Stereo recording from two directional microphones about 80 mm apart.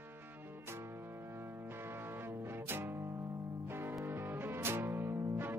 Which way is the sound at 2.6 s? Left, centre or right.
Right.